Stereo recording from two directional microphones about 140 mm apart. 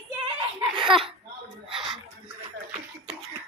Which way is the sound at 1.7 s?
5° right (ahead or behind).